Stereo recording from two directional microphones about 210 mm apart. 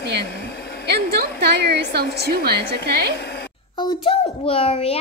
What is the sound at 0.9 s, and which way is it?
A woman's voice, 50° right (ahead or behind).